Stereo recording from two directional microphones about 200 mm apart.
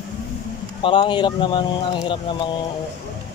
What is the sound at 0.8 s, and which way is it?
Speech, 25° left (ahead or behind).